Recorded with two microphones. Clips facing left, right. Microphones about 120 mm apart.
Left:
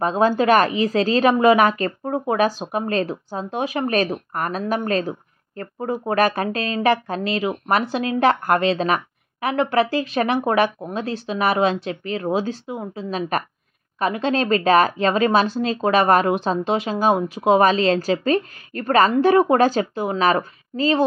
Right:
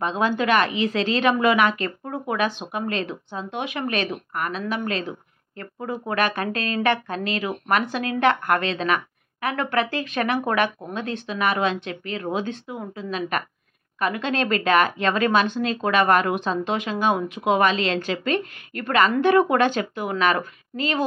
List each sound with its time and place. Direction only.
0.0 s speech: 40° left (ahead or behind)